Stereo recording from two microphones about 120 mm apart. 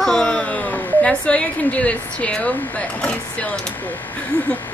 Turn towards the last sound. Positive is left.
turn(degrees=15)  # may be behind; listen again after turning